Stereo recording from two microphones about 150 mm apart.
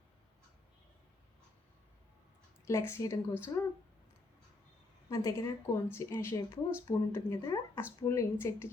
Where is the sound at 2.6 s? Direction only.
20° left (ahead or behind).